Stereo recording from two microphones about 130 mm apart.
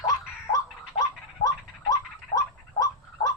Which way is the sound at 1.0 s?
25° left (ahead or behind).